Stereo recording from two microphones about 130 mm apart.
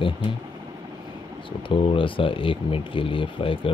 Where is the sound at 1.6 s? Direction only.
40° left (ahead or behind).